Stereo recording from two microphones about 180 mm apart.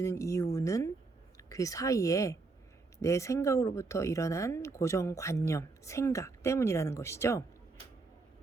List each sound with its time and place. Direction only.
0.0 s a woman's voice: 15° left (ahead or behind)